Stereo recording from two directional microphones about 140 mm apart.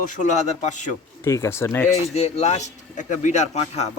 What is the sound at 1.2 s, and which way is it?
Speech, 20° left (ahead or behind).